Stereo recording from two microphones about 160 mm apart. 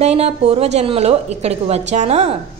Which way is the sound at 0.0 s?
40° right (ahead or behind).